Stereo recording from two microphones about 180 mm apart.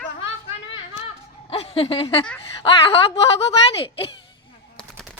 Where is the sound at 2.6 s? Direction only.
30° left (ahead or behind).